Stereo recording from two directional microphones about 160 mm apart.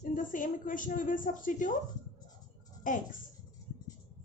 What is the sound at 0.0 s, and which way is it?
A woman's voice, 55° left (ahead or behind).